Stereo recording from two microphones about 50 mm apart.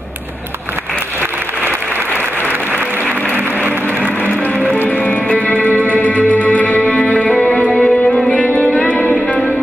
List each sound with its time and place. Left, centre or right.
3.3 s applause: right
4.9 s music: left
7.2 s music: centre
8.3 s music: left